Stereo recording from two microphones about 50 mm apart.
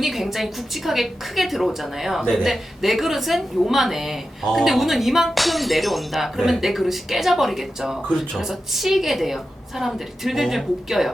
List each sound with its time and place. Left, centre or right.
0.0 s speech: centre
8.0 s speech: centre
8.4 s speech: centre